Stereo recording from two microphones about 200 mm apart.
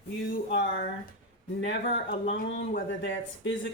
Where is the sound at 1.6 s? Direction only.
55° left (ahead or behind).